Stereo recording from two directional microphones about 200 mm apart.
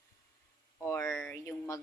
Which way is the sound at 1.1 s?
Centre (ahead or behind).